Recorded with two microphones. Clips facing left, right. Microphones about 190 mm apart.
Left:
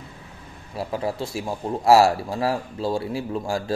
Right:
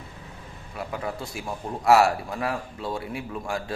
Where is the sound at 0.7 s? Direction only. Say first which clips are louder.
Left 5 dB; 30° left (ahead or behind).